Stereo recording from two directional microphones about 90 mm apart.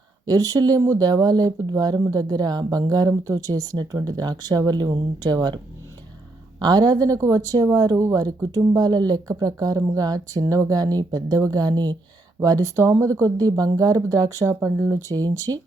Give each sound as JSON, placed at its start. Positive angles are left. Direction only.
{"t": 0.3, "sound": "speech", "side_deg": -40}
{"t": 6.6, "sound": "speech", "side_deg": -50}
{"t": 12.4, "sound": "speech", "side_deg": -40}